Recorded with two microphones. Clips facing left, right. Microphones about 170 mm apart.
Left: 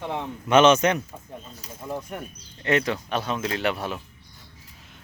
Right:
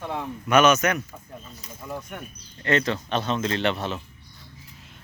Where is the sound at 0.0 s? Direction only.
20° left (ahead or behind).